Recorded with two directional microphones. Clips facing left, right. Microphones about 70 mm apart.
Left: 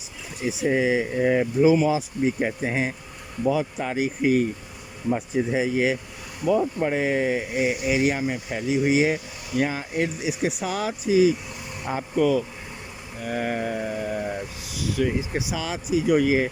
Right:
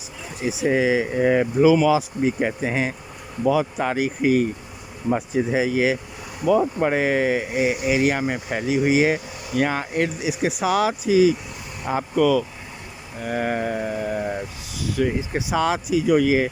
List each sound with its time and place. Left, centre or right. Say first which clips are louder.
0.5 s speech: right 2 dB; right
5.1 s speech: right 3 dB; right
13.2 s vehicle: right 3 dB; right
14.7 s speech: right 2 dB; right
15.5 s speech: right 6 dB; right